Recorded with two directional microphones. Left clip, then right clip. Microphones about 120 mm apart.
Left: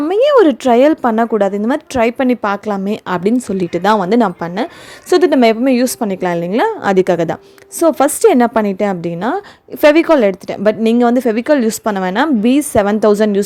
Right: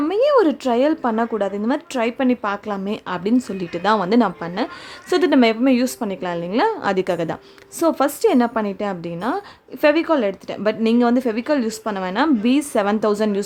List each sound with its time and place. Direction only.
0.1 s a woman's voice: 45° left (ahead or behind)